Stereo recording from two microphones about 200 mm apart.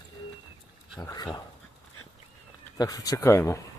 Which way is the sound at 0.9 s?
20° left (ahead or behind).